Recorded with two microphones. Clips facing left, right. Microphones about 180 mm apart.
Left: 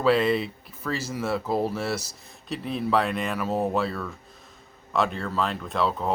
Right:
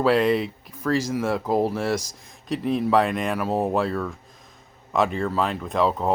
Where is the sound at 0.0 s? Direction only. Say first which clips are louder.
Right 2 dB; 10° right (ahead or behind).